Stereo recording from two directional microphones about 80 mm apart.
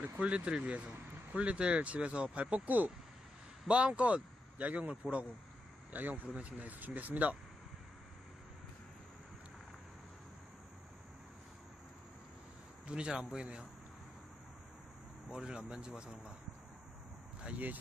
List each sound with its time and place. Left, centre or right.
0.2 s speech: centre
5.9 s speech: right
12.8 s speech: centre
15.3 s speech: centre
17.5 s speech: centre